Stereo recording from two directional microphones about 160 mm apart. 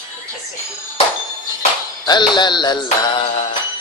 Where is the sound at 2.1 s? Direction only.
25° left (ahead or behind).